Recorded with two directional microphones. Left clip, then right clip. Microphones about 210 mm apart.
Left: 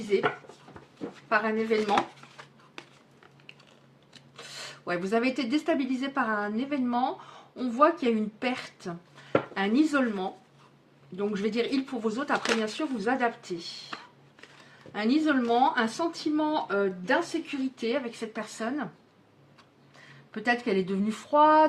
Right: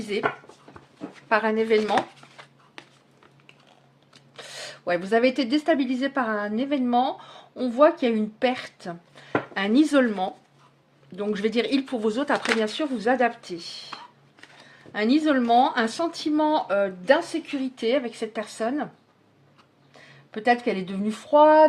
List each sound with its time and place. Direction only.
0.1 s speech: 45° right (ahead or behind)
1.3 s speech: 45° right (ahead or behind)
4.4 s speech: 35° right (ahead or behind)
14.9 s speech: 40° right (ahead or behind)
20.3 s speech: 30° right (ahead or behind)